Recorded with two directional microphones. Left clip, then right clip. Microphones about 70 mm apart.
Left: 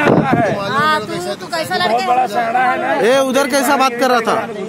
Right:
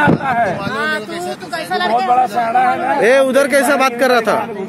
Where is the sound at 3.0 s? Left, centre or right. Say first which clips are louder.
Right 3 dB; left.